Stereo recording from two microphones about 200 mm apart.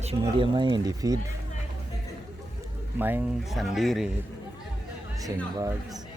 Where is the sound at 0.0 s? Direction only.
30° right (ahead or behind).